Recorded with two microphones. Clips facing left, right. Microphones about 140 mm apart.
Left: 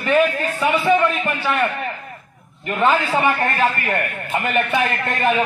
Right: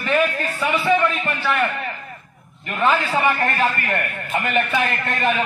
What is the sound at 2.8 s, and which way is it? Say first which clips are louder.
A man's voice: left 1 dB; 15° left (ahead or behind).